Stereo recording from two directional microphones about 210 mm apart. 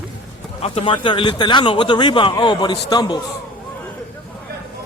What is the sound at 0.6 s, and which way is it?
Speech, 25° left (ahead or behind).